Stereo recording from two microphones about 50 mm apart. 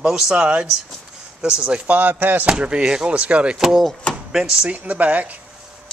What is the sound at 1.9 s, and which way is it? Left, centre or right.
Speech, right.